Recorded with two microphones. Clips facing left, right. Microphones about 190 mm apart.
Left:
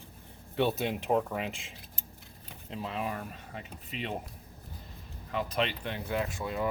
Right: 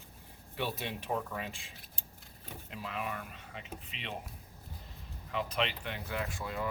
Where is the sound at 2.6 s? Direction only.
30° left (ahead or behind).